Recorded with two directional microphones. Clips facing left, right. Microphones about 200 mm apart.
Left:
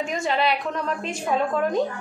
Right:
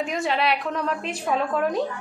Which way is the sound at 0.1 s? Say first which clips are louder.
Left 2 dB; centre (ahead or behind).